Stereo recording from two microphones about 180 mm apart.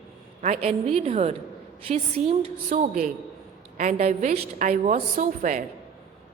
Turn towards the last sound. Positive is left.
turn(degrees=-45)  # may be behind; listen again after turning